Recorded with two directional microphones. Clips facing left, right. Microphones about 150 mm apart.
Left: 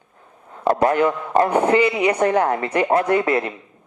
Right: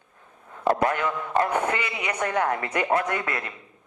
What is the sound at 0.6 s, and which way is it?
Speech, 35° left (ahead or behind).